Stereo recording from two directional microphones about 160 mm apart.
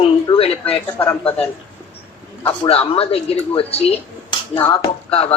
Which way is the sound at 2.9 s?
35° left (ahead or behind).